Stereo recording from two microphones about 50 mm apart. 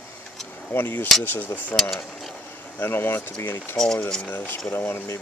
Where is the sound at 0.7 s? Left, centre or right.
Left.